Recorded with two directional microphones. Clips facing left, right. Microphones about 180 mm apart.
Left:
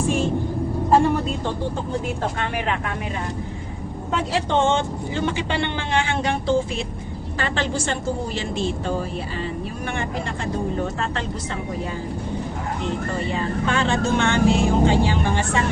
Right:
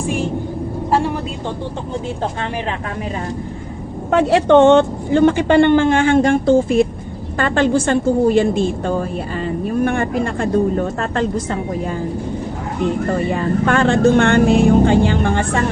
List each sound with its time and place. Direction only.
4.1 s a man's voice: 65° right (ahead or behind); by 11.6 s 50° right (ahead or behind)
13.1 s speech: 55° right (ahead or behind)